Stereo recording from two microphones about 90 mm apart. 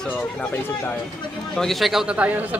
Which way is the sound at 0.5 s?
25° left (ahead or behind).